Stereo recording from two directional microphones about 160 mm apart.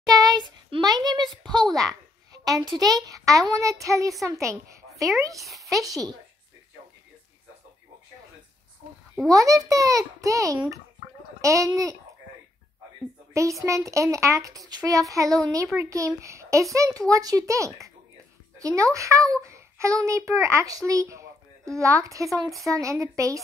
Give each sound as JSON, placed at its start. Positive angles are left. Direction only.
{"t": 0.0, "sound": "a sound", "side_deg": -20}
{"t": 0.7, "sound": "a child's voice", "side_deg": -30}
{"t": 1.7, "sound": "a child's voice", "side_deg": 0}
{"t": 2.3, "sound": "a sound", "side_deg": -25}
{"t": 2.7, "sound": "a child's voice", "side_deg": -25}
{"t": 9.3, "sound": "a child's voice", "side_deg": -20}
{"t": 13.3, "sound": "a child's voice", "side_deg": -20}